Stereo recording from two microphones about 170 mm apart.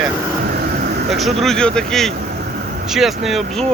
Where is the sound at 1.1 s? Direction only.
Centre (ahead or behind).